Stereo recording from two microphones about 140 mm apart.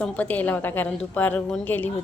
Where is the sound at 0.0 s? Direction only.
10° left (ahead or behind).